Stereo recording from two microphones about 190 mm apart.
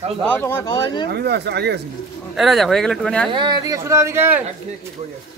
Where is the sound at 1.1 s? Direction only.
60° right (ahead or behind).